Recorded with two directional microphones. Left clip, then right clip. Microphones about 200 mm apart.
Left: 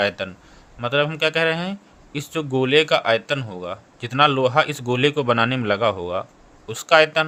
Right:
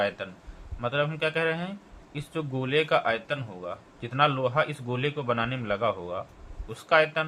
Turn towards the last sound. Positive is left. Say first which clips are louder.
# left 7 dB
turn(degrees=50)  # may be behind; listen again after turning